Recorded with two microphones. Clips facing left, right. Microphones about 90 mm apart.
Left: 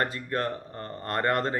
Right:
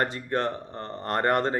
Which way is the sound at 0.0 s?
25° right (ahead or behind).